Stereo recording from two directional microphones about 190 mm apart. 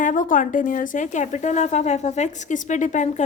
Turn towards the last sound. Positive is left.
turn(degrees=40)  # may be behind; listen again after turning